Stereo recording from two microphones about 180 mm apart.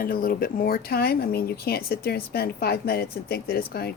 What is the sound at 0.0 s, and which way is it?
Speech, 50° left (ahead or behind).